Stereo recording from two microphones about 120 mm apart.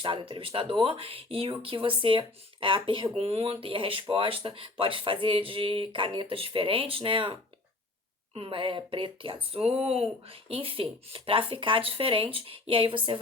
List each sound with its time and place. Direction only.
0.0 s speech: 45° right (ahead or behind)
3.3 s speech: 55° right (ahead or behind)